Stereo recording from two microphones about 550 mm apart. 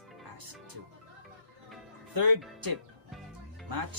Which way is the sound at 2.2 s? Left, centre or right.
Right.